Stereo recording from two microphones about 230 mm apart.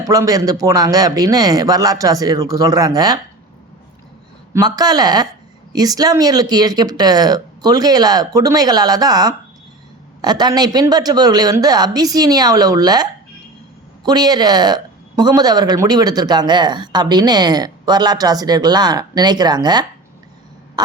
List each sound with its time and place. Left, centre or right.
0.0 s speech: centre
4.5 s speech: centre
20.8 s a sound: centre